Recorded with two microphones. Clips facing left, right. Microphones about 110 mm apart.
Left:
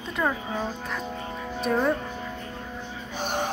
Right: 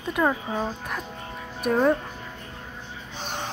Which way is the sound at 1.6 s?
10° right (ahead or behind).